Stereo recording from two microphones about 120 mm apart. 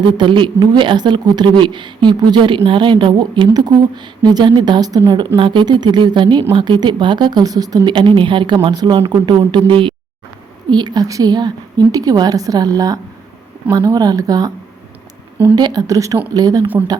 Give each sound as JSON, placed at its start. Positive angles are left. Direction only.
{"t": 0.2, "sound": "speech", "side_deg": -40}
{"t": 15.5, "sound": "speech", "side_deg": -35}